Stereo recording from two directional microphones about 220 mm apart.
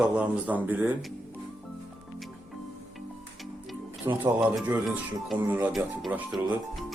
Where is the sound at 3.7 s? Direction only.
10° right (ahead or behind).